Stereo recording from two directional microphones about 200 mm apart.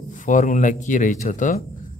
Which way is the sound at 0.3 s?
40° left (ahead or behind).